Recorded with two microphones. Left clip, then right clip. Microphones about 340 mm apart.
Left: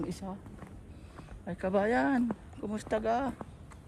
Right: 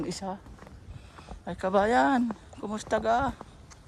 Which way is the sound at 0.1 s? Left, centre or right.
Centre.